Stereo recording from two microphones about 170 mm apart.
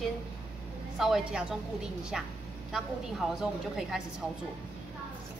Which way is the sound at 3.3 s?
5° right (ahead or behind).